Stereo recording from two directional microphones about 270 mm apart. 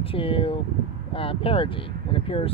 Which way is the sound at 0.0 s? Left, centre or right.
Centre.